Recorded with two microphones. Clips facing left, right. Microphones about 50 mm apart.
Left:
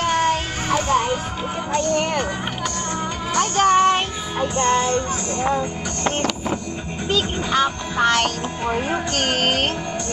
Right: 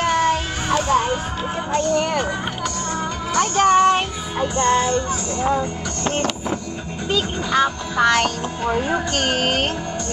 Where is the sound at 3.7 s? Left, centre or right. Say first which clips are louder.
Right 1 dB; left.